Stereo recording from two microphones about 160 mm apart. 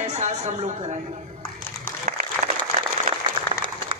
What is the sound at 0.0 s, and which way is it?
Speech, 45° right (ahead or behind).